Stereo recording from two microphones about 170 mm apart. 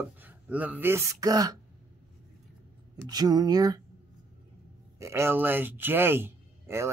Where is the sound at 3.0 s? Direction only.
25° right (ahead or behind).